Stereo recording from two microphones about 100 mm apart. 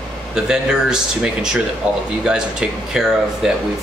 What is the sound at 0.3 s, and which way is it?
Speech, 5° right (ahead or behind).